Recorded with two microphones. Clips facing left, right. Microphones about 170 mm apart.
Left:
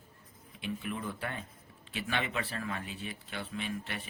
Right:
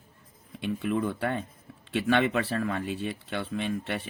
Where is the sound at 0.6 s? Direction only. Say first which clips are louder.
Right 9 dB; 60° right (ahead or behind).